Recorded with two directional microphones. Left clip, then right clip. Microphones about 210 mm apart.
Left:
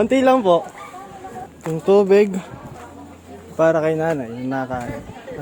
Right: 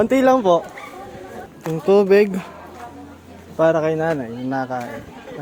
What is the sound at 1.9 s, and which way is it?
Speech, 5° left (ahead or behind).